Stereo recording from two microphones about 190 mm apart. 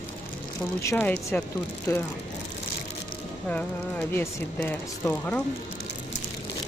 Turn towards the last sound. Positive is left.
turn(degrees=10)  # may be behind; listen again after turning